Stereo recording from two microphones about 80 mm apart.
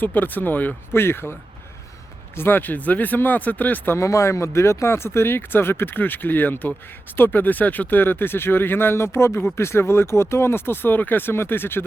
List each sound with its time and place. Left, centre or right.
0.0 s speech: left
3.9 s speech: left